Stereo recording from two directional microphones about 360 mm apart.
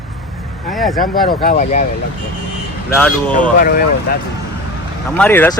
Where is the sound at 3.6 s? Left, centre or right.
Left.